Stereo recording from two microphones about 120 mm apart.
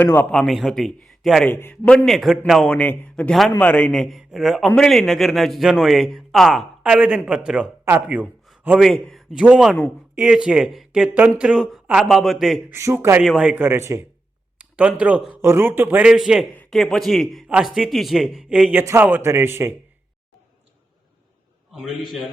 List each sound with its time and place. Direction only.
0.0 s a man's voice: 15° left (ahead or behind)
0.3 s speech: centre (ahead or behind)
1.5 s a man's voice: 15° left (ahead or behind)
2.0 s speech: centre (ahead or behind)
2.6 s a man's voice: 15° left (ahead or behind); by 8.8 s 10° right (ahead or behind)
8.8 s a man's voice: centre (ahead or behind)
12.7 s a man's voice: 20° right (ahead or behind)
13.2 s a man's voice: 10° right (ahead or behind); by 14.1 s 25° right (ahead or behind)
14.6 s speech: 10° right (ahead or behind)
15.4 s a man's voice: 20° right (ahead or behind)
21.7 s speech: centre (ahead or behind)